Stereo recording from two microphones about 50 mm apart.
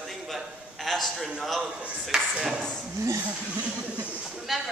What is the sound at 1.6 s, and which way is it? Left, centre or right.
Speech, right.